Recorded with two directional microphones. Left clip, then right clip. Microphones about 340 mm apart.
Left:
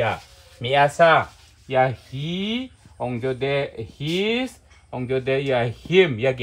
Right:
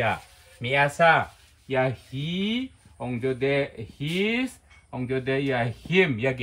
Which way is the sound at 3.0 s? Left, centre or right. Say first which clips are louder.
Left 2 dB; centre.